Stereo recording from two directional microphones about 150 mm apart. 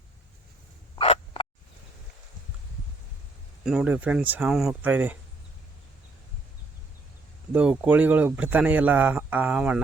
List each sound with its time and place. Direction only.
0.9 s a sound: 40° left (ahead or behind)
3.6 s speech: 5° right (ahead or behind)
7.5 s speech: 5° right (ahead or behind)